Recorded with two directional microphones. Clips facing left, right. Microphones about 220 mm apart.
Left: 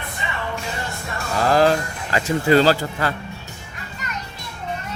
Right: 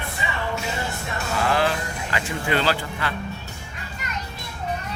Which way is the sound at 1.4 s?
40° left (ahead or behind).